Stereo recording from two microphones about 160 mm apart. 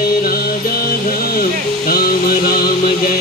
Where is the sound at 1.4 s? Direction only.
70° left (ahead or behind).